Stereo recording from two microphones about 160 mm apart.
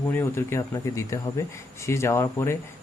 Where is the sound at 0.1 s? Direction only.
15° left (ahead or behind).